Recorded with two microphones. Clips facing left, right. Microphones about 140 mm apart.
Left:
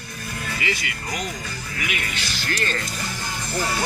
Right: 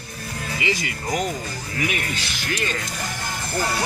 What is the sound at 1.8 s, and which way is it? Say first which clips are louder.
Speech: right 4 dB; 40° right (ahead or behind).